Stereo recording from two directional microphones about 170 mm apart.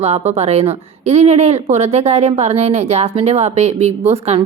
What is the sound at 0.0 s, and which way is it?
Speech, 40° right (ahead or behind).